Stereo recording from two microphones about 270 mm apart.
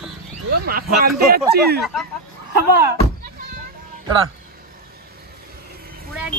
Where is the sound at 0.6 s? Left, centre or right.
Right.